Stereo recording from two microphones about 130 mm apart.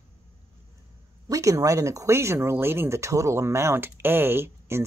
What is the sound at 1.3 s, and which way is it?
Speech, 25° right (ahead or behind).